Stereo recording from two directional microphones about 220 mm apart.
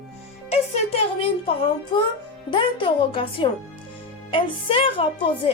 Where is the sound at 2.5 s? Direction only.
20° left (ahead or behind).